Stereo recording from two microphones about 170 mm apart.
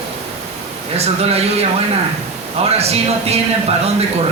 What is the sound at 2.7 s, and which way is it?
Speech, 40° right (ahead or behind).